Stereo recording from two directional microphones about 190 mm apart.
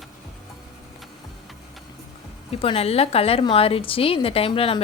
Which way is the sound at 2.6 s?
30° left (ahead or behind).